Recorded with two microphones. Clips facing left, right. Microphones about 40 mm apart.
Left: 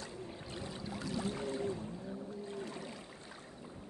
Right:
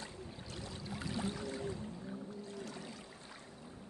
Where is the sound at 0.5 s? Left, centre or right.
Left.